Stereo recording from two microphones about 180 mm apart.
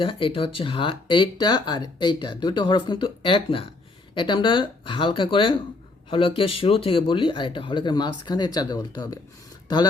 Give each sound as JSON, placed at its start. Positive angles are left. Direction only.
{"t": 0.0, "sound": "speech", "side_deg": 30}